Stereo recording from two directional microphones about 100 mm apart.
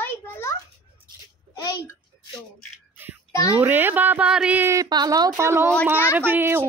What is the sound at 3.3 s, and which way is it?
Speech, 30° left (ahead or behind).